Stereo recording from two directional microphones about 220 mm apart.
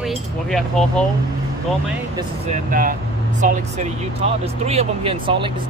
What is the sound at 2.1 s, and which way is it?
Speech, 30° right (ahead or behind).